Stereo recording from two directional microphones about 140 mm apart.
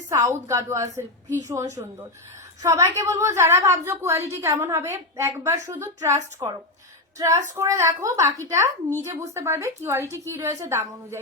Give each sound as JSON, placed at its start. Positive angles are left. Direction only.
{"t": 0.3, "sound": "a woman's voice", "side_deg": -20}